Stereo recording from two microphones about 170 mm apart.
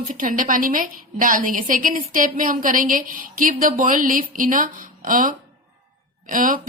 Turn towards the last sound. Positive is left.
turn(degrees=-50)  # may be behind; listen again after turning